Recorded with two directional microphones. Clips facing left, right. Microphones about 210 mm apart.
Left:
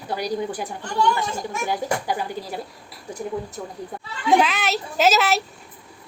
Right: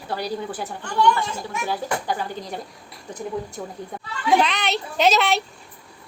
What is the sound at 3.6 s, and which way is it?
Speech, 5° right (ahead or behind).